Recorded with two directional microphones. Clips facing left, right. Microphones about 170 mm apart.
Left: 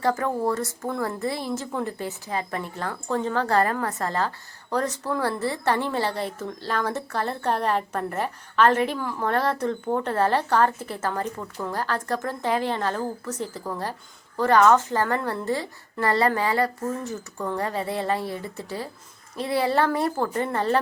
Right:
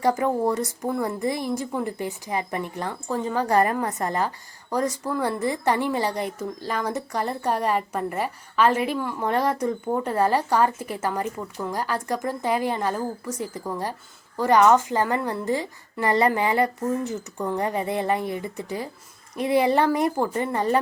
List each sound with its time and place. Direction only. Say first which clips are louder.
0.0 s a woman's voice: right 2 dB; 15° right (ahead or behind)